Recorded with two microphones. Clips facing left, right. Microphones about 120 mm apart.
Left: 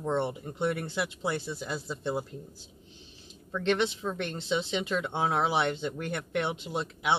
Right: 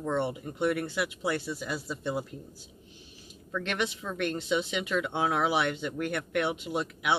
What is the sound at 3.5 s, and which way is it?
Speech, 25° left (ahead or behind).